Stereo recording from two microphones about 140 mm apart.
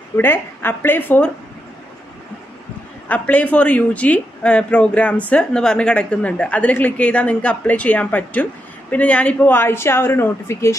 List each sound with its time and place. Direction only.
0.2 s speech: 15° left (ahead or behind)
3.1 s speech: 10° left (ahead or behind)